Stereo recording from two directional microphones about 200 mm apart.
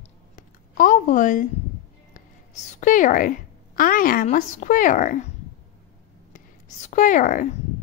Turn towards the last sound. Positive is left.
turn(degrees=40)  # may be behind; listen again after turning